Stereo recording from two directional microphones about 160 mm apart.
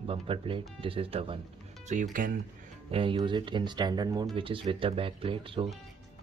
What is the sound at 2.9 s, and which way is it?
Speech, 30° right (ahead or behind).